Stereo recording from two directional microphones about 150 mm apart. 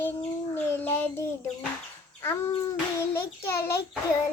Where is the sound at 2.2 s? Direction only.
15° left (ahead or behind).